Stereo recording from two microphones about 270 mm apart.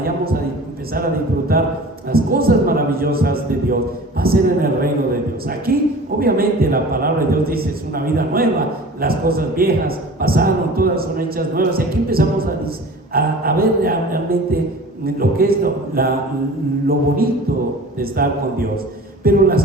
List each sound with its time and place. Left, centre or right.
1.5 s a man's voice: right
17.2 s a man's voice: right